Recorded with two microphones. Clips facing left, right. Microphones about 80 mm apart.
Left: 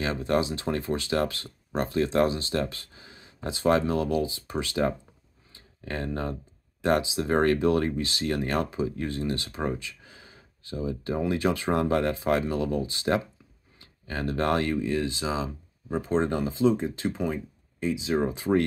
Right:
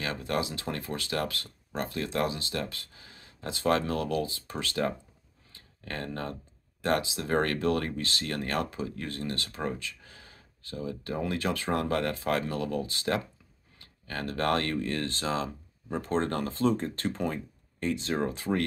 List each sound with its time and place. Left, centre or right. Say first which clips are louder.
0.0 s speech: left 5 dB; left
5.5 s a sound: left 4 dB; centre
6.8 s speech: left 4 dB; centre
18.3 s speech: left 6 dB; centre